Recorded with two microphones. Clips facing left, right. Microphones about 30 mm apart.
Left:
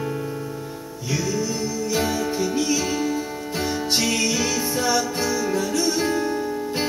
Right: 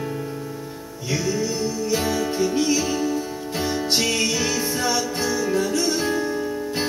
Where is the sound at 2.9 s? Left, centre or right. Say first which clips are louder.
Right 1 dB; centre.